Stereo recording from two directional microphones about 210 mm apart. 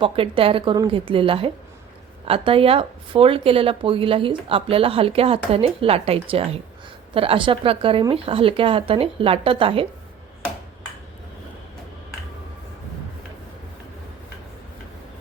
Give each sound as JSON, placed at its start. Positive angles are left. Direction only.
{"t": 0.0, "sound": "speech", "side_deg": -25}